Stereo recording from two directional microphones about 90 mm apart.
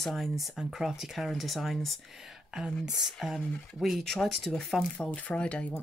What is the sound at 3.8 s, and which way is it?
Speech, centre (ahead or behind).